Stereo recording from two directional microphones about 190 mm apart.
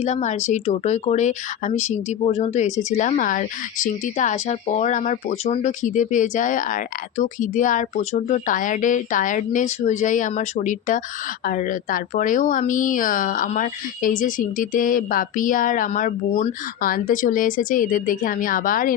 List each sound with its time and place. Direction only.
0.0 s a woman's voice: 35° left (ahead or behind)